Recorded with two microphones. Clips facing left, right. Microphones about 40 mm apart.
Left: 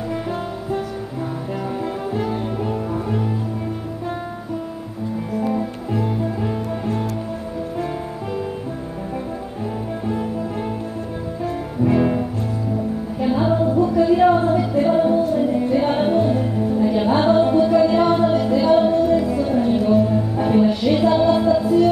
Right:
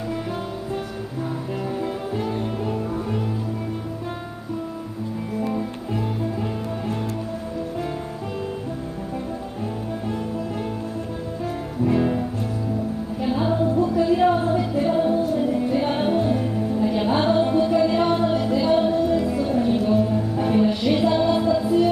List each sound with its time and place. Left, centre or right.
2.1 s music: centre
5.4 s music: centre
11.4 s music: centre